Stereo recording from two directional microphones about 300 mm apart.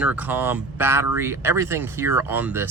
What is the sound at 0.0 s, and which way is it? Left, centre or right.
Speech, centre.